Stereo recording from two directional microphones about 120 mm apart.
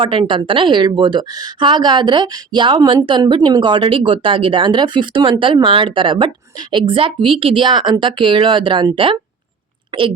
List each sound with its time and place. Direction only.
0.0 s a woman's voice: 45° right (ahead or behind)